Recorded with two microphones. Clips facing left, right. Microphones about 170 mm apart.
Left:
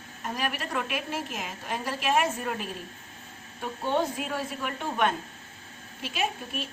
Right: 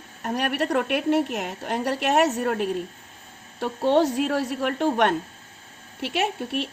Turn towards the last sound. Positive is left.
turn(degrees=-70)  # may be behind; listen again after turning